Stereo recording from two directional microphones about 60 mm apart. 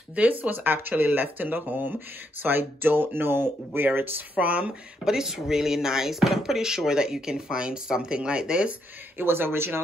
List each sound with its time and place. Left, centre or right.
0.1 s speech: right
4.4 s speech: right
5.0 s speech: centre
9.2 s speech: right